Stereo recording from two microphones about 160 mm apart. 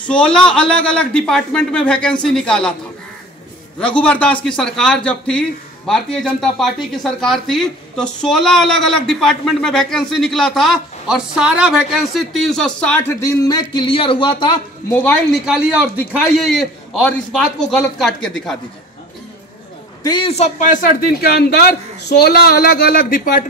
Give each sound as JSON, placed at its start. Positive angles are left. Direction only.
{"t": 0.0, "sound": "speech", "side_deg": 5}
{"t": 4.0, "sound": "speech", "side_deg": 10}
{"t": 13.1, "sound": "speech", "side_deg": 20}
{"t": 14.9, "sound": "speech", "side_deg": 10}
{"t": 15.3, "sound": "speech", "side_deg": -5}
{"t": 20.0, "sound": "a man's voice", "side_deg": 30}